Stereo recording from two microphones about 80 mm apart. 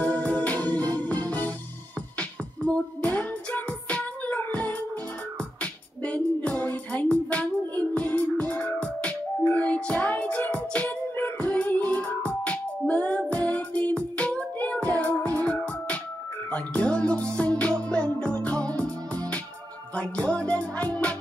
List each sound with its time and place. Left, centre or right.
0.0 s music: centre
2.1 s music: centre